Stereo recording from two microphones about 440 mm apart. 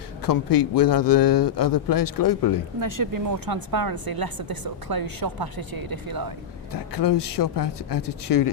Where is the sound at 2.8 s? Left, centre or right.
Right.